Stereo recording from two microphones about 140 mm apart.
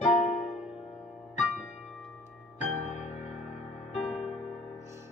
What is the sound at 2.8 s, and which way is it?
Music, 60° left (ahead or behind).